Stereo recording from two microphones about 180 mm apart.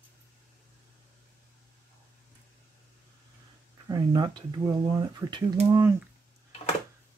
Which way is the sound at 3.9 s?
25° right (ahead or behind).